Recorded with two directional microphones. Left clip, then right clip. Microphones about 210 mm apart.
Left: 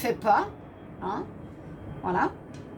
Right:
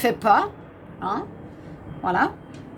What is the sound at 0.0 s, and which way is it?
Speech, 45° right (ahead or behind).